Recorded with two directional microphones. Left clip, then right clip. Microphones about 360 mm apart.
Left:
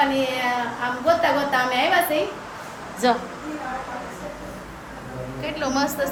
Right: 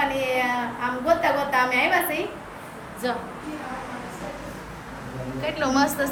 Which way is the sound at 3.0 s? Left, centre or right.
Left.